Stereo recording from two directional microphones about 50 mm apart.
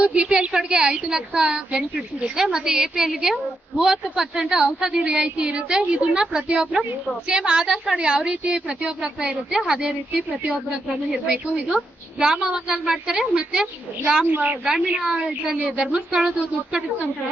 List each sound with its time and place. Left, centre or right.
0.0 s a woman's voice: right
14.3 s a woman's voice: right
14.9 s a woman's voice: centre